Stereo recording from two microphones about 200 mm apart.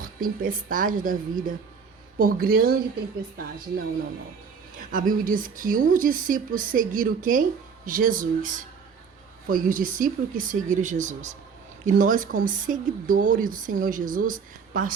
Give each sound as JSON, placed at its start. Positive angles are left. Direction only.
{"t": 0.0, "sound": "speech", "side_deg": -45}
{"t": 4.9, "sound": "speech", "side_deg": -45}